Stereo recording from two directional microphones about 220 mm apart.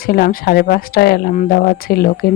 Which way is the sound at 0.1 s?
40° left (ahead or behind).